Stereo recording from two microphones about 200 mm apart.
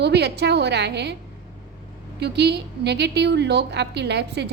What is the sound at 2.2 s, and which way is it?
A woman's voice, 55° right (ahead or behind).